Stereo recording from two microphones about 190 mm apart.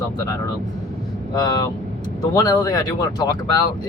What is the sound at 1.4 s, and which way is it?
Speech, 20° left (ahead or behind).